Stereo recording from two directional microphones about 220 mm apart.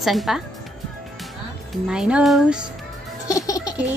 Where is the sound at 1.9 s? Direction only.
5° right (ahead or behind).